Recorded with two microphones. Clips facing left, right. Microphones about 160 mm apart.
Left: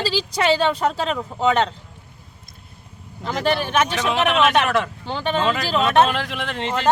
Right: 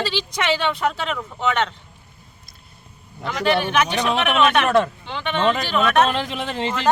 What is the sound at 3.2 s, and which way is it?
Speech, 40° left (ahead or behind).